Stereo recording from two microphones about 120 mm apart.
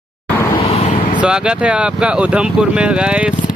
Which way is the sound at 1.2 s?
5° right (ahead or behind).